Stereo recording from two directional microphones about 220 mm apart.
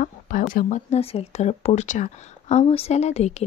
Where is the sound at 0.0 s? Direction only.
35° left (ahead or behind).